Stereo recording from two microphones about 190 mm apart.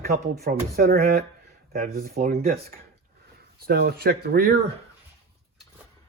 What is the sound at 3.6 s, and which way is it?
Speech, 55° right (ahead or behind).